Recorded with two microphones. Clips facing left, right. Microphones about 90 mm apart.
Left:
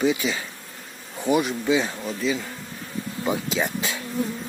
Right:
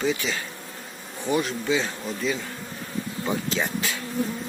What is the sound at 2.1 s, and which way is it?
Speech, centre (ahead or behind).